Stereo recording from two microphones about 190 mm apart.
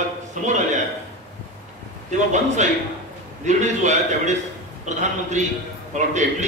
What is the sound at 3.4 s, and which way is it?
A man's voice, 40° right (ahead or behind).